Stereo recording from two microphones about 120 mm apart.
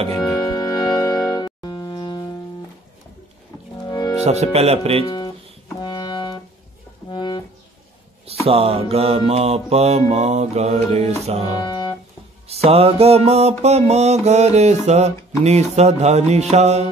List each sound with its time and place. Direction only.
0.1 s music: 30° left (ahead or behind)
3.8 s music: 35° left (ahead or behind)
4.2 s mantra: 65° right (ahead or behind)
5.0 s guitar: 40° left (ahead or behind)
5.8 s music: 35° left (ahead or behind)
8.5 s mantra: 55° right (ahead or behind)
11.5 s music: 40° left (ahead or behind)
12.4 s mantra: 55° right (ahead or behind)